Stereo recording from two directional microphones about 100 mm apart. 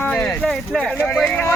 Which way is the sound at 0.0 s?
15° left (ahead or behind).